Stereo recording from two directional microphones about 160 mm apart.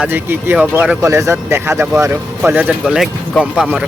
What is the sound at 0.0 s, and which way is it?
Speech, 10° right (ahead or behind).